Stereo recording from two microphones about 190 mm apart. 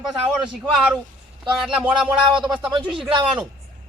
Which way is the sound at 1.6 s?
5° right (ahead or behind).